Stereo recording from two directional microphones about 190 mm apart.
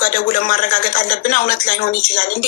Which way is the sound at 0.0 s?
45° left (ahead or behind).